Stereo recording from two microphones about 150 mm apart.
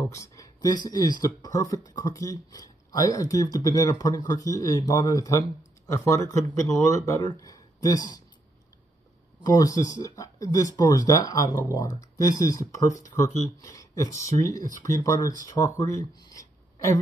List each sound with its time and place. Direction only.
0.0 s speech: 20° left (ahead or behind)
9.5 s speech: 25° left (ahead or behind)